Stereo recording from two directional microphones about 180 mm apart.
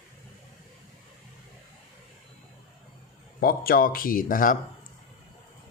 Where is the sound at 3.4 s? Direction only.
55° left (ahead or behind).